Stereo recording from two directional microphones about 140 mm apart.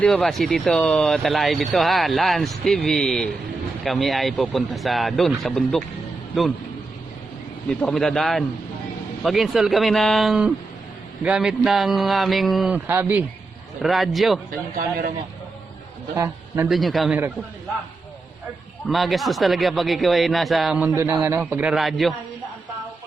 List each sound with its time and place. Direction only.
0.0 s speech: 5° left (ahead or behind)
7.8 s speech: 5° left (ahead or behind)
12.7 s a man's voice: 15° right (ahead or behind)
13.8 s speech: centre (ahead or behind)
14.8 s speech: 90° right
16.1 s a man's voice: 15° right (ahead or behind)
16.6 s speech: centre (ahead or behind)
18.9 s speech: centre (ahead or behind)
20.7 s a man's voice: 15° right (ahead or behind)